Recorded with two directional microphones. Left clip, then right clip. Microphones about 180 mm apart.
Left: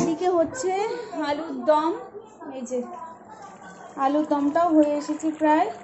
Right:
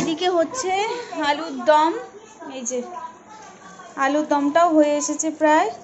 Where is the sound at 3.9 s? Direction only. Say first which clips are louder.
Right 3 dB; 10° left (ahead or behind).